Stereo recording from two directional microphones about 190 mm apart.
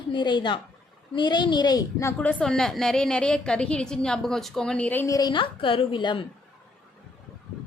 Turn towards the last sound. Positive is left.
turn(degrees=25)  # may be behind; listen again after turning